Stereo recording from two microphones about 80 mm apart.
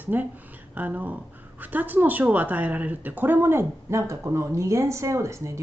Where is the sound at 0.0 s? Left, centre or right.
Right.